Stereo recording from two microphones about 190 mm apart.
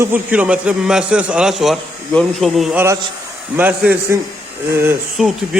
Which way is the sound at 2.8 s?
15° right (ahead or behind).